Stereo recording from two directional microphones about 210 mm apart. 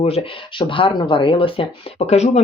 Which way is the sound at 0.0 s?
30° left (ahead or behind).